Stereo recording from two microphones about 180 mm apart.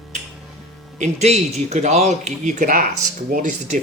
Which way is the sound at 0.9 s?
40° right (ahead or behind).